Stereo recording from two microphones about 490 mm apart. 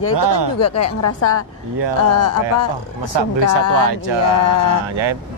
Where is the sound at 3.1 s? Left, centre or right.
Right.